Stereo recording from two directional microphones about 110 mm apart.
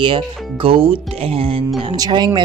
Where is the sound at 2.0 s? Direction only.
45° right (ahead or behind).